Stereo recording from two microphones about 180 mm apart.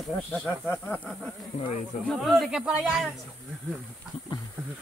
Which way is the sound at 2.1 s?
Centre (ahead or behind).